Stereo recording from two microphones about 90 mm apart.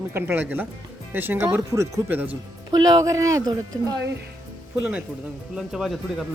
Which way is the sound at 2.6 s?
50° right (ahead or behind).